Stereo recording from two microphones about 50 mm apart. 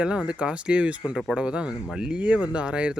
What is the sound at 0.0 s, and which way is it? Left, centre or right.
Speech, right.